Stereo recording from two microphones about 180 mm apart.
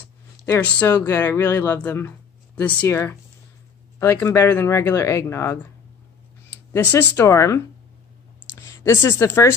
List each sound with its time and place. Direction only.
0.0 s a sound: 10° left (ahead or behind)
0.9 s speech: 15° left (ahead or behind)
6.7 s speech: 10° left (ahead or behind)